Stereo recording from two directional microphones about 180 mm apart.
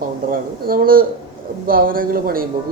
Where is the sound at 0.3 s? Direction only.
55° right (ahead or behind).